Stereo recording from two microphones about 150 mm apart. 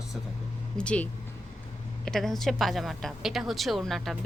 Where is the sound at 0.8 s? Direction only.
5° left (ahead or behind).